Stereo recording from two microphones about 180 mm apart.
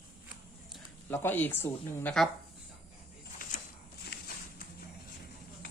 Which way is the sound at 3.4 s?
50° left (ahead or behind).